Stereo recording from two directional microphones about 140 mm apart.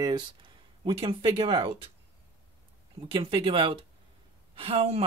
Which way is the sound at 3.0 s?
40° right (ahead or behind).